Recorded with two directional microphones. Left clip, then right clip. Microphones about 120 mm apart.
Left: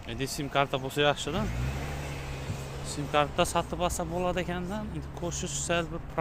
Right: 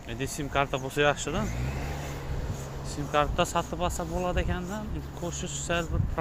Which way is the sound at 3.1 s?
30° left (ahead or behind).